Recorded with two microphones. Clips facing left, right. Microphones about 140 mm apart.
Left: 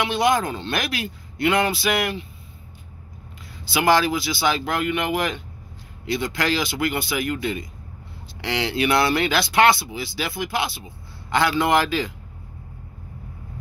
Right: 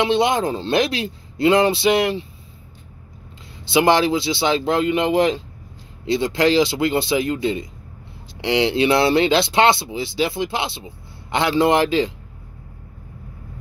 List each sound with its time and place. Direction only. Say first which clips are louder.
0.0 s speech: right 3 dB; 25° right (ahead or behind)
3.7 s speech: right 3 dB; 25° right (ahead or behind)